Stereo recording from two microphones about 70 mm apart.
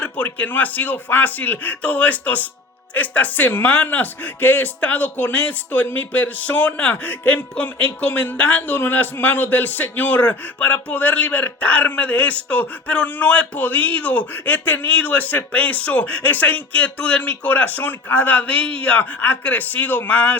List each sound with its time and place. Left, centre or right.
0.0 s speech: centre